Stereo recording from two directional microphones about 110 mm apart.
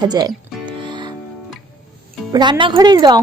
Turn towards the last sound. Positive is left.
turn(degrees=-40)  # may be behind; listen again after turning